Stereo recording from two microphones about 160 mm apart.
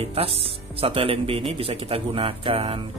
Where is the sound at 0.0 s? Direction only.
35° right (ahead or behind).